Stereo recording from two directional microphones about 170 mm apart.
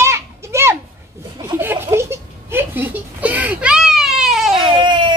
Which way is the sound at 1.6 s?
15° right (ahead or behind).